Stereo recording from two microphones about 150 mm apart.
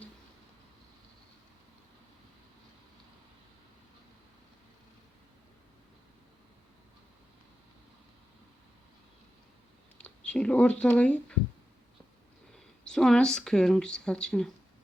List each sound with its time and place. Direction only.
10.0 s speech: 5° left (ahead or behind)
12.5 s speech: 5° left (ahead or behind)